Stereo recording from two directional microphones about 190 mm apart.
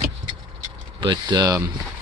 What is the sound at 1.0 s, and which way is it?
Speech, 25° right (ahead or behind).